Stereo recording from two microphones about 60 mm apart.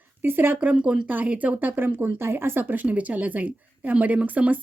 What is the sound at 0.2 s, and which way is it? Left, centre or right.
Speech, right.